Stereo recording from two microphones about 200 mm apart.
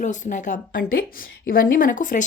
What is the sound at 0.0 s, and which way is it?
A woman's voice, 40° left (ahead or behind).